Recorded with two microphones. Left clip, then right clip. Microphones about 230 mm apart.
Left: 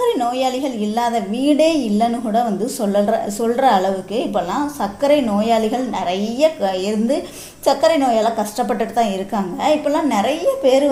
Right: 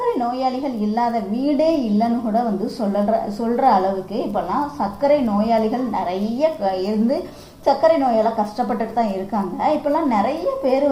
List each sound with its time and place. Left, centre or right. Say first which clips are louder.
0.3 s a woman's voice: left 2 dB; left
4.8 s a woman's voice: left 2 dB; left